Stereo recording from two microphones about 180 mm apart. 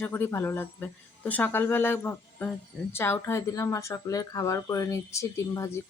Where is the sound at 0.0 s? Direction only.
15° left (ahead or behind).